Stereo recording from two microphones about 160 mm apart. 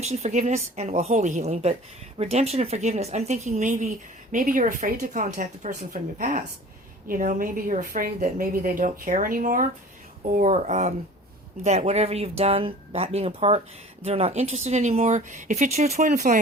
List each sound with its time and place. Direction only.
0.0 s speech: 45° right (ahead or behind); by 9.6 s 60° right (ahead or behind)
10.3 s speech: 50° right (ahead or behind)